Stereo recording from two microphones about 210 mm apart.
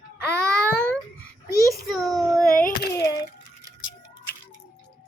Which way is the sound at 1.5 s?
15° right (ahead or behind).